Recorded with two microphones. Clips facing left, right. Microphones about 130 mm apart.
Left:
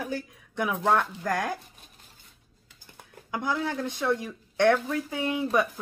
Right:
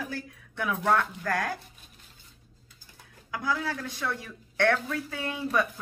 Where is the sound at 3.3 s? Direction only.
25° left (ahead or behind).